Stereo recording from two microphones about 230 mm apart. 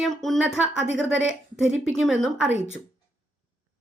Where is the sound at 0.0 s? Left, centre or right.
Centre.